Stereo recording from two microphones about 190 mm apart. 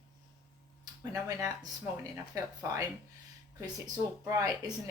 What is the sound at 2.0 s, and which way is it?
Speech, 20° right (ahead or behind).